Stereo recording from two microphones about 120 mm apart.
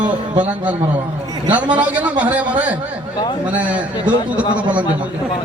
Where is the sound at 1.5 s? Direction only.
10° right (ahead or behind).